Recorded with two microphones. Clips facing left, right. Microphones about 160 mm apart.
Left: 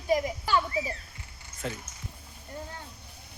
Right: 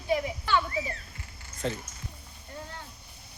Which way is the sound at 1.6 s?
5° left (ahead or behind).